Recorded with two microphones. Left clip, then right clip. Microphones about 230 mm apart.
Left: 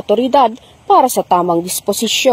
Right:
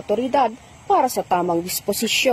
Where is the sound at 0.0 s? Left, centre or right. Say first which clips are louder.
Left 8 dB; left.